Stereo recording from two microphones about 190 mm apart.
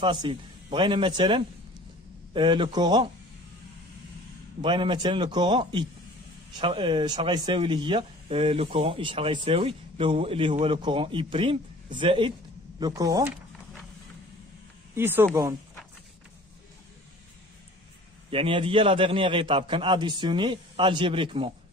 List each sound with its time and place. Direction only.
0.0 s speech: 25° right (ahead or behind)
4.6 s speech: 25° right (ahead or behind)
15.0 s speech: 10° right (ahead or behind)
18.3 s speech: 30° right (ahead or behind)